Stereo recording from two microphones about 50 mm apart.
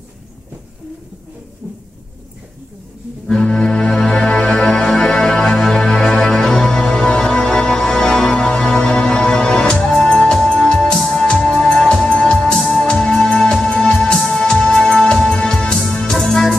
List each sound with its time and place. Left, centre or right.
3.3 s music: centre
9.8 s music: centre
10.0 s music: centre